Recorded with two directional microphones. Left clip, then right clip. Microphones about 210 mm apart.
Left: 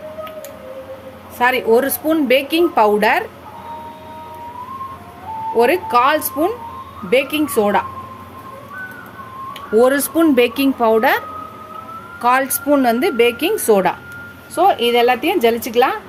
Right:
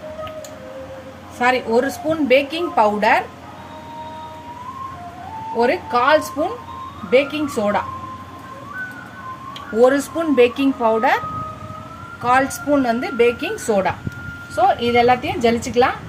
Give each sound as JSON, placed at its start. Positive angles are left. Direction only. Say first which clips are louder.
{"t": 1.4, "sound": "a woman's voice", "louder": "left 3 dB", "side_deg": 55}
{"t": 5.5, "sound": "a woman's voice", "louder": "left 4 dB", "side_deg": 50}
{"t": 9.8, "sound": "a woman's voice", "louder": "even", "side_deg": 45}
{"t": 12.2, "sound": "a woman's voice", "louder": "left 1 dB", "side_deg": 45}